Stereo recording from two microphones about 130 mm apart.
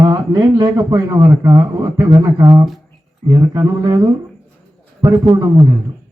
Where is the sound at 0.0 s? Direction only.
35° right (ahead or behind).